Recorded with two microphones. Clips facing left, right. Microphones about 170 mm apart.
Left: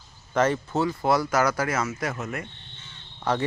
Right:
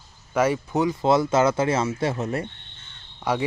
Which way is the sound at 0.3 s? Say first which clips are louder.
Right 2 dB; 10° right (ahead or behind).